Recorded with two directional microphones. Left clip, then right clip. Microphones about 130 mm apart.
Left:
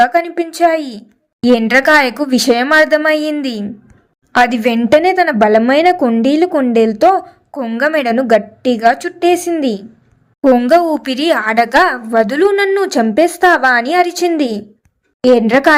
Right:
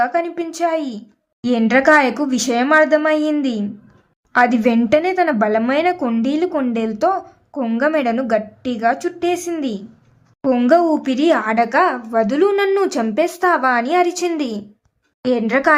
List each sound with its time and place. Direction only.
0.0 s a woman's voice: 35° left (ahead or behind)
3.8 s a sound: 35° left (ahead or behind)
4.9 s a woman's voice: 35° left (ahead or behind)
6.5 s a woman's voice: 25° left (ahead or behind)